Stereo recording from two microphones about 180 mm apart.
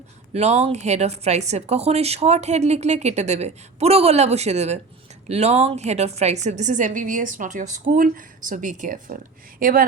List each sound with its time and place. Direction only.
0.3 s a woman's voice: 35° right (ahead or behind); by 9.8 s 50° right (ahead or behind)